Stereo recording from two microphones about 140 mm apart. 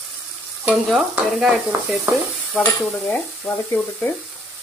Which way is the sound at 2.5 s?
10° left (ahead or behind).